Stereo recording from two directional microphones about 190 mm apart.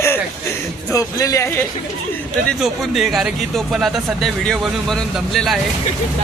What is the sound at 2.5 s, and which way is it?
Speech, centre (ahead or behind).